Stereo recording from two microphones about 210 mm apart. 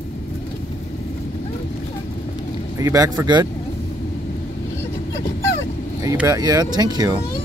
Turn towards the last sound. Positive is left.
turn(degrees=-20)  # may be behind; listen again after turning